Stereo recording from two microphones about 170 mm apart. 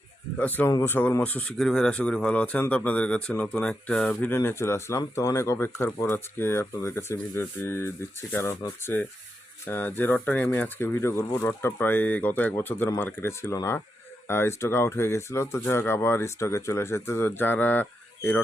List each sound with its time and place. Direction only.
0.3 s speech: 10° left (ahead or behind)